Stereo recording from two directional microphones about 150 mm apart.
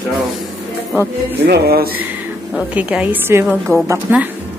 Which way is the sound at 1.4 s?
90° right.